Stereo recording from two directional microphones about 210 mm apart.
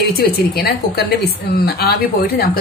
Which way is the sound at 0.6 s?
50° left (ahead or behind).